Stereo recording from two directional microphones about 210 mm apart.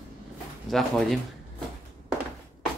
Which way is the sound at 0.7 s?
Centre (ahead or behind).